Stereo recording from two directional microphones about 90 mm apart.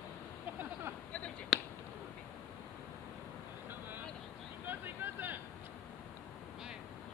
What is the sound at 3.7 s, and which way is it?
Vehicle, 20° right (ahead or behind).